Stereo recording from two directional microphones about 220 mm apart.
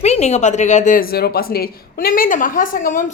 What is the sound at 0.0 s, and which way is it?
Speech, 30° left (ahead or behind).